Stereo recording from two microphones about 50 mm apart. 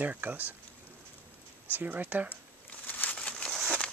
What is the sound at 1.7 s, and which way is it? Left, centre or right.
Speech, right.